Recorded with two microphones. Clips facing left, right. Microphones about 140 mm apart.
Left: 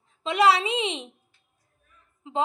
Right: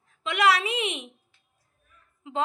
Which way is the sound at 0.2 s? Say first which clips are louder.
Left 3 dB; 30° left (ahead or behind).